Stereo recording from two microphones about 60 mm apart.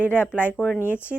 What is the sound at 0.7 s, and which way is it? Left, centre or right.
Speech, left.